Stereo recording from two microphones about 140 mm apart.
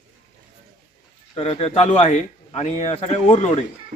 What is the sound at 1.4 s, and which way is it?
Speech, 45° left (ahead or behind).